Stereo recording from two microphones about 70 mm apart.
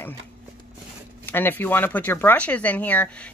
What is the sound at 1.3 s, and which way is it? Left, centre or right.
Speech, left.